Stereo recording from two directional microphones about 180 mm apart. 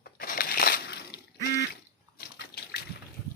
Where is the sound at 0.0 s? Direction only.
55° left (ahead or behind).